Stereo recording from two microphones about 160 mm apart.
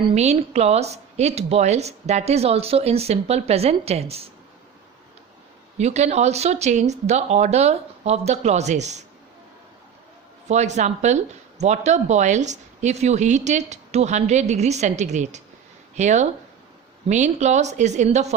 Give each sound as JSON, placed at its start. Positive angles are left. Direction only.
{"t": 0.1, "sound": "a woman's voice", "side_deg": -45}
{"t": 5.7, "sound": "a woman's voice", "side_deg": -45}
{"t": 10.5, "sound": "a woman's voice", "side_deg": -45}